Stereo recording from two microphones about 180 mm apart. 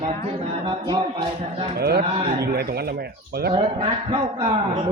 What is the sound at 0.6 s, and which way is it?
Speech, 30° right (ahead or behind).